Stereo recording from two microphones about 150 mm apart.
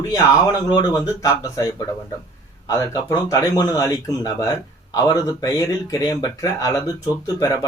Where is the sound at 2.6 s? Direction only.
20° left (ahead or behind).